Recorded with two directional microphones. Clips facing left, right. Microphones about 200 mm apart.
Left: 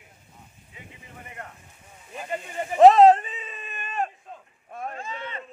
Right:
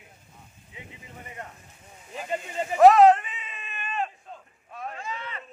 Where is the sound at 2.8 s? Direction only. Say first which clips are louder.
Left 2 dB; 30° left (ahead or behind).